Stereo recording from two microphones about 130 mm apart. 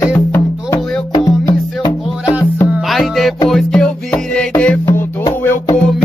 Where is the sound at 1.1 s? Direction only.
30° left (ahead or behind).